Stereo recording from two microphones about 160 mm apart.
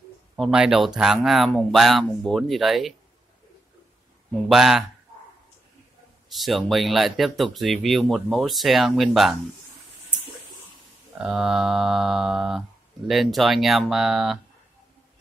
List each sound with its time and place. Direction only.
0.4 s speech: 5° right (ahead or behind)
4.5 s speech: centre (ahead or behind)
6.3 s speech: centre (ahead or behind)
11.1 s speech: 5° right (ahead or behind)